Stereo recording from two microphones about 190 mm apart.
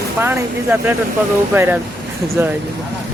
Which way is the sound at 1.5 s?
15° right (ahead or behind).